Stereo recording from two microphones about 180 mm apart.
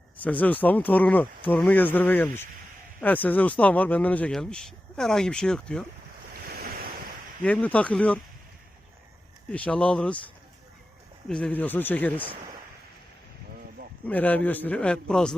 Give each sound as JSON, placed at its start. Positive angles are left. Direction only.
{"t": 0.2, "sound": "speech", "side_deg": 10}
{"t": 6.5, "sound": "waves", "side_deg": -55}
{"t": 7.4, "sound": "speech", "side_deg": 5}
{"t": 9.5, "sound": "speech", "side_deg": 5}
{"t": 11.3, "sound": "speech", "side_deg": 5}
{"t": 14.1, "sound": "speech", "side_deg": 10}